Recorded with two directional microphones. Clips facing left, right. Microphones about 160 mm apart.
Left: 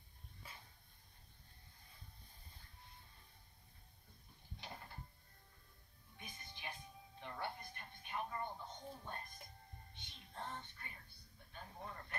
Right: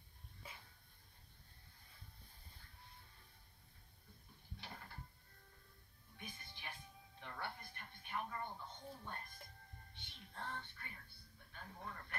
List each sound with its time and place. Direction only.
4.6 s mechanisms: 20° left (ahead or behind)
6.1 s music: 20° left (ahead or behind)
11.5 s a sound: 25° left (ahead or behind)